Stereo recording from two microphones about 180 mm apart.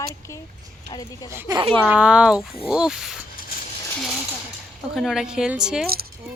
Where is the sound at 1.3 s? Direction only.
15° right (ahead or behind).